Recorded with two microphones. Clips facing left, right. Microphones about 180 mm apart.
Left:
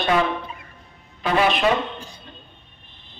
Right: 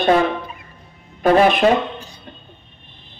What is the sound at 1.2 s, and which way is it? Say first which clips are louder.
Speech: right 7 dB; 45° right (ahead or behind).